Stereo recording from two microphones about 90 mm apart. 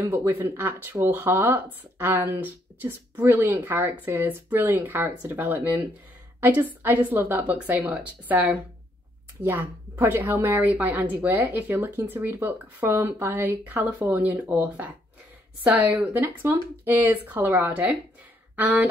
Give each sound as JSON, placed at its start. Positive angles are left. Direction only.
{"t": 0.3, "sound": "a woman's voice", "side_deg": -20}